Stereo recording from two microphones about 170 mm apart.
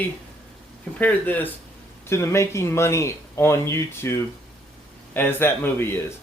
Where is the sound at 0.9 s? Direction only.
10° left (ahead or behind).